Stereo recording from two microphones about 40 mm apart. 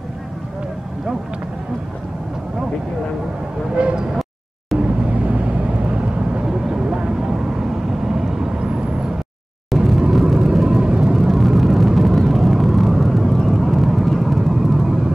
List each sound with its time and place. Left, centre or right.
3.7 s speech: right
4.7 s vehicle: right
6.4 s vehicle: centre
9.7 s vehicle: centre; by 11.1 s right
11.1 s vehicle: centre